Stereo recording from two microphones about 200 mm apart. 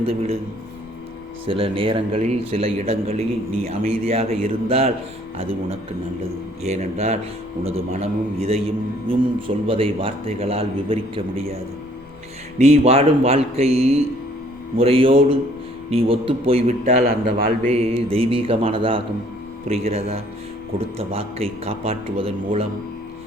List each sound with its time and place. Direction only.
0.0 s speech: 30° right (ahead or behind)
1.5 s speech: 30° right (ahead or behind)